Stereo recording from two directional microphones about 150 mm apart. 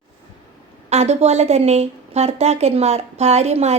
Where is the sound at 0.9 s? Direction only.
45° right (ahead or behind).